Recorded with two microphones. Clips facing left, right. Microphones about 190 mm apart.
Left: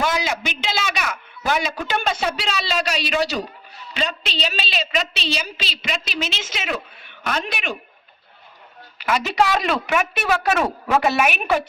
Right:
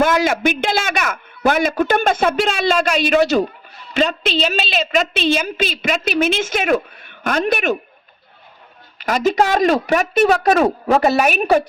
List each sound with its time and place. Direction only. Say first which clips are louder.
0.0 s a man's voice: right 8 dB; 50° right (ahead or behind)
9.0 s speech: right 4 dB; 45° right (ahead or behind)